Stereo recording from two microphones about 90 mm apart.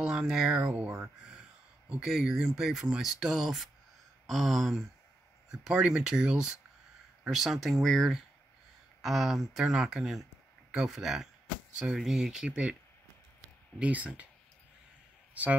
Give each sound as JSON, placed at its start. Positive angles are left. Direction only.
{"t": 0.0, "sound": "speech", "side_deg": -10}
{"t": 13.7, "sound": "speech", "side_deg": -15}
{"t": 15.4, "sound": "speech", "side_deg": -15}